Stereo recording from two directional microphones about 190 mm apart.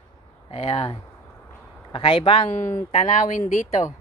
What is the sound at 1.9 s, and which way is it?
Cattle, 25° left (ahead or behind).